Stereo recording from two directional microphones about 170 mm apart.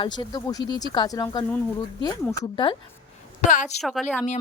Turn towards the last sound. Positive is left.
turn(degrees=5)  # may be behind; listen again after turning